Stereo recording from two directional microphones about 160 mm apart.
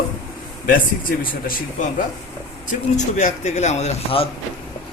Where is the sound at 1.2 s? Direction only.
60° left (ahead or behind).